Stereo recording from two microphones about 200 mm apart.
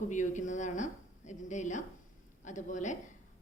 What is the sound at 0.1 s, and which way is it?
A woman's voice, 40° left (ahead or behind).